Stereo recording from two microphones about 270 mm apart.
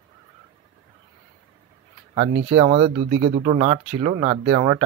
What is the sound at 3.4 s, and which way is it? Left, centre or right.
Speech, right.